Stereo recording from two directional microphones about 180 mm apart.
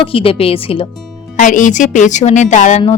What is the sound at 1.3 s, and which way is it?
A woman's voice, 45° left (ahead or behind).